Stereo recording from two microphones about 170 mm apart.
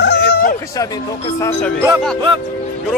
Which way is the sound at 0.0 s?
80° left.